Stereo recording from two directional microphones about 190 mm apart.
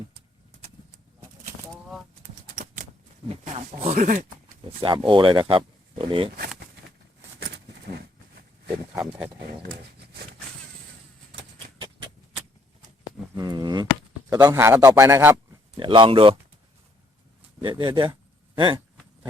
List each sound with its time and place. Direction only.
3.2 s speech: 35° right (ahead or behind)
4.8 s speech: 25° right (ahead or behind)
7.3 s a sound: 60° right (ahead or behind)
9.0 s speech: 5° right (ahead or behind)
9.7 s a sound: 55° right (ahead or behind)
11.8 s a sound: 25° right (ahead or behind)
13.3 s speech: 20° right (ahead or behind)
14.3 s a man's voice: 10° right (ahead or behind)
15.8 s speech: 25° right (ahead or behind)
17.6 s speech: 25° right (ahead or behind)